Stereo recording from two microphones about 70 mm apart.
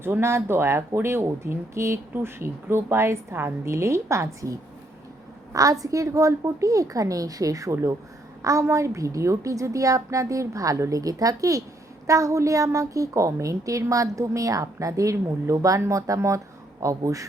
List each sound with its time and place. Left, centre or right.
0.0 s a woman's voice: right
5.5 s a woman's voice: right